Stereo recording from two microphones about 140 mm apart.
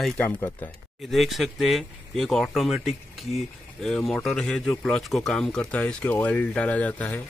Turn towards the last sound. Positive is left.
turn(degrees=10)  # may be behind; listen again after turning